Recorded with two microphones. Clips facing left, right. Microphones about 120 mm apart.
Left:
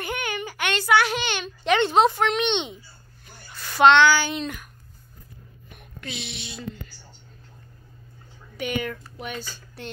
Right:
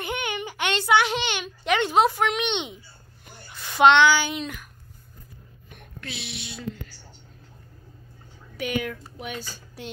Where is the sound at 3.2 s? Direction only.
15° right (ahead or behind); by 4.7 s centre (ahead or behind).